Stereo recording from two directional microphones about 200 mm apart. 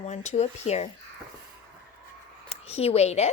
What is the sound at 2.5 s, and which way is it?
Speech, 30° left (ahead or behind).